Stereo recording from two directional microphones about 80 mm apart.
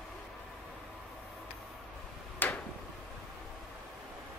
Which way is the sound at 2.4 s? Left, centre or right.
Left.